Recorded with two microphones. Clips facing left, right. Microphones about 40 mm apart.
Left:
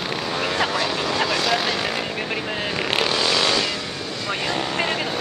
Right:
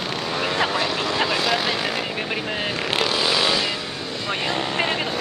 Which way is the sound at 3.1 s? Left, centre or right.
Centre.